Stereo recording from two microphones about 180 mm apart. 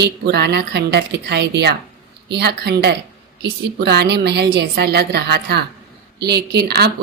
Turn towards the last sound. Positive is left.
turn(degrees=-65)  # may be behind; listen again after turning